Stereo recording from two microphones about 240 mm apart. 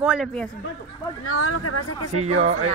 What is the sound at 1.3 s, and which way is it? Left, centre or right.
Speech, left.